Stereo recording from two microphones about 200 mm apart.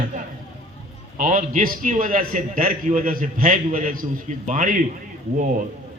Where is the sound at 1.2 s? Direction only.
40° right (ahead or behind).